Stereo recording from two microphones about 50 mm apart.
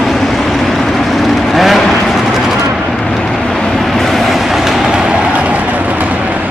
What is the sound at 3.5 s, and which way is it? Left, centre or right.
Vehicle, centre.